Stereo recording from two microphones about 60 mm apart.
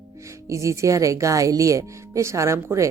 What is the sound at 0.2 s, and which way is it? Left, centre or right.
Speech, right.